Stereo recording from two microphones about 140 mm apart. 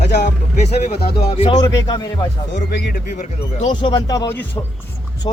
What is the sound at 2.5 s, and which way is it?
Speech, 90° left.